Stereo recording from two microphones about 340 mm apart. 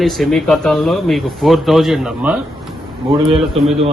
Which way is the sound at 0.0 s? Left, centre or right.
Centre.